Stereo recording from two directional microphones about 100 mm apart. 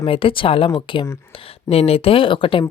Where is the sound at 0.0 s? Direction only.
65° left (ahead or behind).